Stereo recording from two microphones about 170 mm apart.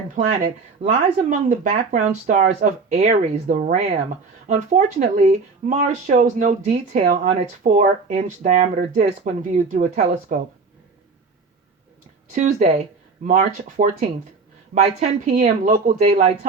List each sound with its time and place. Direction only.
0.3 s speech: 40° right (ahead or behind)
12.3 s speech: 45° right (ahead or behind)